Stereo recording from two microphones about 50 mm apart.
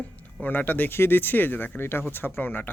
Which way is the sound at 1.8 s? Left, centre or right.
Left.